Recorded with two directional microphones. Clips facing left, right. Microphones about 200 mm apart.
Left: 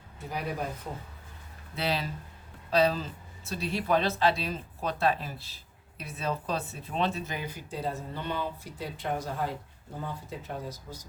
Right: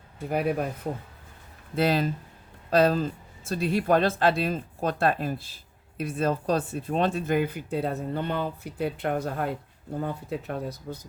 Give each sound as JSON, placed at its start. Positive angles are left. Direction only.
{"t": 0.3, "sound": "speech", "side_deg": -55}
{"t": 1.7, "sound": "speech", "side_deg": -50}